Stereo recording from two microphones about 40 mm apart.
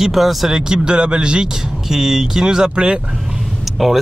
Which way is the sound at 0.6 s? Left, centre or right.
Centre.